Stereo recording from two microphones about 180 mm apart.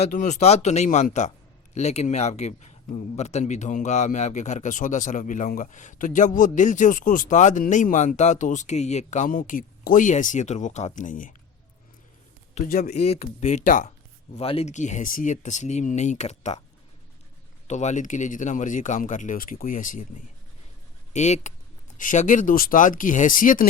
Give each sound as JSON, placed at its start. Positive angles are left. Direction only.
{"t": 0.0, "sound": "a man's voice", "side_deg": 40}
{"t": 12.5, "sound": "speech", "side_deg": 50}
{"t": 14.3, "sound": "speech", "side_deg": 35}
{"t": 17.7, "sound": "a man's voice", "side_deg": 40}